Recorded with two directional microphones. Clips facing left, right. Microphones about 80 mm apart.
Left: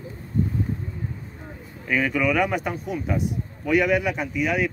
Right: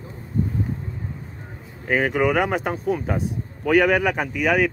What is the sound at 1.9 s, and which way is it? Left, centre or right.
Speech, right.